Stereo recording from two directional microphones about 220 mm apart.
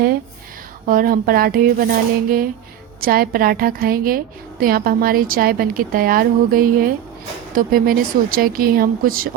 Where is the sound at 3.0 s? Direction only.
40° right (ahead or behind).